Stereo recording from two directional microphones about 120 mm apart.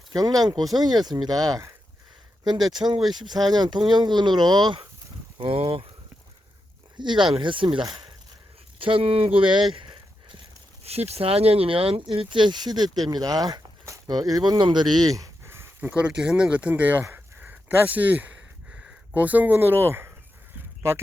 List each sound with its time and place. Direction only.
0.1 s speech: 30° right (ahead or behind); by 5.8 s 50° right (ahead or behind)
6.9 s speech: 40° right (ahead or behind)
8.8 s speech: 50° right (ahead or behind)
9.7 s a sound: 45° right (ahead or behind)
10.8 s speech: 60° right (ahead or behind); by 14.6 s 30° right (ahead or behind)
14.6 s a sound: 40° right (ahead or behind); by 15.9 s 20° right (ahead or behind)
15.9 s speech: 10° right (ahead or behind)